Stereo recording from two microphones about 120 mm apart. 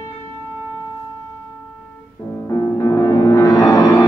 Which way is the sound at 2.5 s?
25° left (ahead or behind).